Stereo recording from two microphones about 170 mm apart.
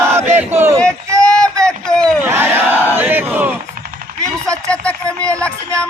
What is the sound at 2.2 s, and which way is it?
Speech, 15° right (ahead or behind).